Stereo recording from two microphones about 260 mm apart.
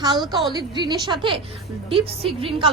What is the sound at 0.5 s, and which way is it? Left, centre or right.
A woman's voice, centre.